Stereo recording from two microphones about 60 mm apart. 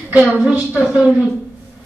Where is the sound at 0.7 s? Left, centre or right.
Centre.